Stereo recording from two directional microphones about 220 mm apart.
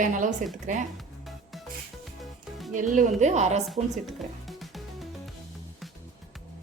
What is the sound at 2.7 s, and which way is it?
Speech, 35° right (ahead or behind).